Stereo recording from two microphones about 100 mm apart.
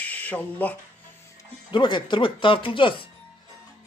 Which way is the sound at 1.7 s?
50° left (ahead or behind).